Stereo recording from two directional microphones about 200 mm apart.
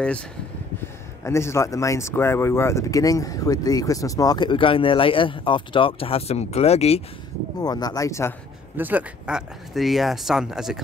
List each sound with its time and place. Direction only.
1.2 s speech: 15° left (ahead or behind); by 7.0 s 30° left (ahead or behind)
7.6 s speech: 20° left (ahead or behind)
8.7 s speech: 10° right (ahead or behind)